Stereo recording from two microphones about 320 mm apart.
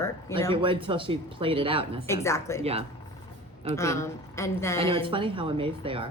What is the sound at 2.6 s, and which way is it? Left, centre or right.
Speech, centre.